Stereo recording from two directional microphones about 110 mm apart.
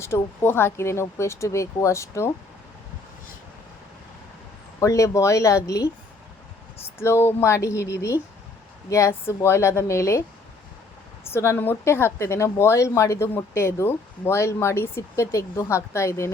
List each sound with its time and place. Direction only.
0.0 s a woman's voice: 25° left (ahead or behind)
4.8 s a woman's voice: 30° left (ahead or behind)
7.0 s a woman's voice: 25° left (ahead or behind)
11.3 s a woman's voice: 20° left (ahead or behind)